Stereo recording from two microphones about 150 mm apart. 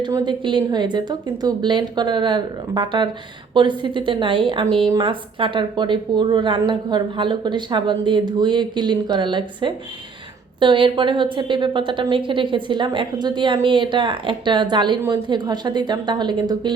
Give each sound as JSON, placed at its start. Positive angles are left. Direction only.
{"t": 0.0, "sound": "a woman's voice", "side_deg": -30}